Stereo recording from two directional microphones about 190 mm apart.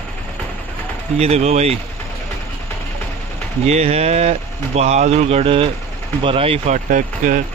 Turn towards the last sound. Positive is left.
turn(degrees=-45)  # may be behind; listen again after turning